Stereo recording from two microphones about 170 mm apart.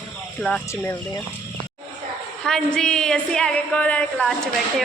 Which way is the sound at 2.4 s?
5° left (ahead or behind).